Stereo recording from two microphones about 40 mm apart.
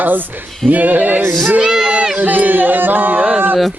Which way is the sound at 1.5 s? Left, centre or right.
Centre.